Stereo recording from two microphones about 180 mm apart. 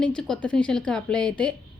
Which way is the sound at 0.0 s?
5° left (ahead or behind).